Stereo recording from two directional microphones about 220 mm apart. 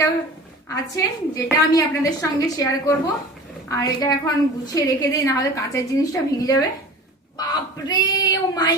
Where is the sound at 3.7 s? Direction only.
15° left (ahead or behind).